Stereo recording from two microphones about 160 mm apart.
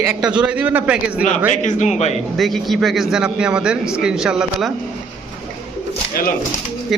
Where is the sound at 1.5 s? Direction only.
50° left (ahead or behind).